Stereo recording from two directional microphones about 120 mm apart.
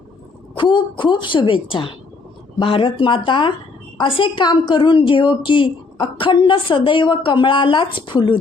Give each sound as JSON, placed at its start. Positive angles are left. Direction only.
{"t": 0.5, "sound": "a woman's voice", "side_deg": 40}